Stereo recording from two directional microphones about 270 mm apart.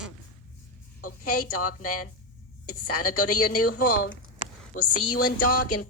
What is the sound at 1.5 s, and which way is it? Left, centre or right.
Speech, left.